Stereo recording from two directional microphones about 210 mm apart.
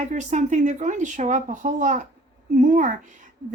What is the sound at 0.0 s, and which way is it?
A woman's voice, 35° right (ahead or behind).